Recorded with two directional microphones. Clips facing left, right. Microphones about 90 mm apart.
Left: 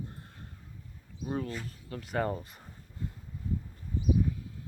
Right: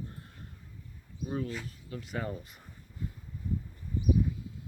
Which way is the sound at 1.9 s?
55° left (ahead or behind).